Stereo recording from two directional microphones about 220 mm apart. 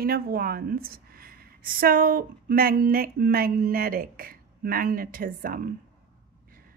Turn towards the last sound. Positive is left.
turn(degrees=-40)  # may be behind; listen again after turning